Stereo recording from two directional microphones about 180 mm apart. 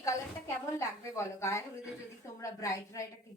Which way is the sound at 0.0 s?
15° left (ahead or behind).